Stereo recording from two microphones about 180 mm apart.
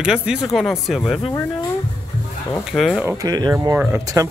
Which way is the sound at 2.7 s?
Centre (ahead or behind).